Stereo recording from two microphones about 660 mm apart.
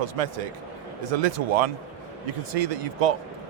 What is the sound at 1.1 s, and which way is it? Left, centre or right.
Speech, right.